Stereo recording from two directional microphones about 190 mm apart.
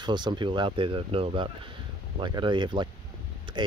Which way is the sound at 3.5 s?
25° right (ahead or behind).